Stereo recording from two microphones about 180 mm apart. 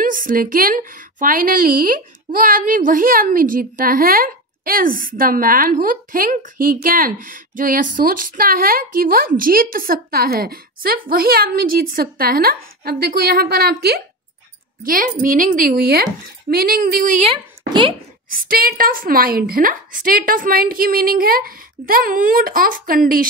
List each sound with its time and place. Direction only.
0.0 s a woman's voice: 50° right (ahead or behind)
17.3 s speech: 30° right (ahead or behind)
18.3 s a woman's voice: 55° right (ahead or behind)